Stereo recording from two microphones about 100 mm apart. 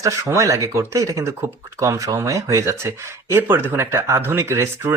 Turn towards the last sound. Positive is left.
turn(degrees=-25)  # may be behind; listen again after turning